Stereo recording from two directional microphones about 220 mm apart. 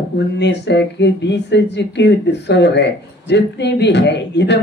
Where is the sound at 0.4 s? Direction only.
50° left (ahead or behind).